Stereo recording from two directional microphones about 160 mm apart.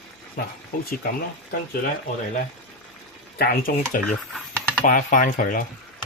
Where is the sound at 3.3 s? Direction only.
70° left (ahead or behind).